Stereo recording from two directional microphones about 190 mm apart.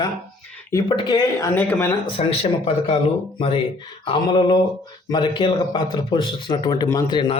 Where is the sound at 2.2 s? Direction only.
30° left (ahead or behind).